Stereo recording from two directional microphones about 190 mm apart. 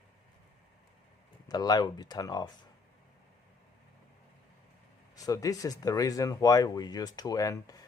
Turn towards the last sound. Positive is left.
turn(degrees=20)  # may be behind; listen again after turning